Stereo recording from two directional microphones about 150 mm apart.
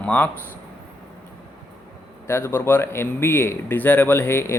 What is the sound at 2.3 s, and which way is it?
Speech, 15° left (ahead or behind).